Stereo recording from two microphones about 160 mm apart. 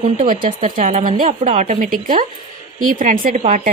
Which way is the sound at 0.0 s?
50° right (ahead or behind).